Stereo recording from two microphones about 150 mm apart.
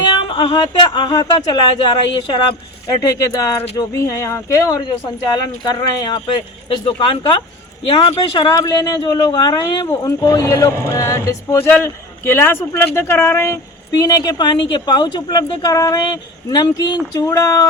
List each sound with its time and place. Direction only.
0.1 s speech: 30° left (ahead or behind)
8.3 s speech: 25° left (ahead or behind)